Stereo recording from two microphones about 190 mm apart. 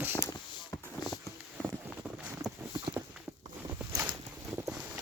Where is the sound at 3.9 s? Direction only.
15° right (ahead or behind).